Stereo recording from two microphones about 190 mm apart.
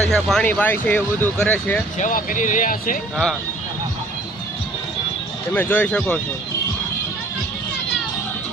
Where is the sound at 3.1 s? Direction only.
Centre (ahead or behind).